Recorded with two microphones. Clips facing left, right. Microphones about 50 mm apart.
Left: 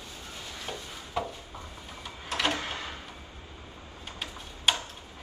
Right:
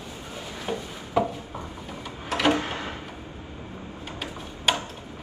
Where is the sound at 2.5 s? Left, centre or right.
Right.